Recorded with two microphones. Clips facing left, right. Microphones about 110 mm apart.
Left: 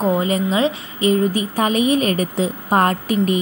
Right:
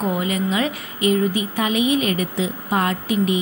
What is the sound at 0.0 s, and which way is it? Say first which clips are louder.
Speech: left 4 dB; 30° left (ahead or behind).